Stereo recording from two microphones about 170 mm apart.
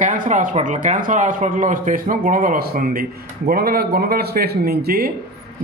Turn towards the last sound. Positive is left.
turn(degrees=-65)  # may be behind; listen again after turning